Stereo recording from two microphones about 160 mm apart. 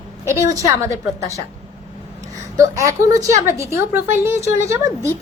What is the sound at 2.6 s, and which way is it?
A woman's voice, 20° right (ahead or behind).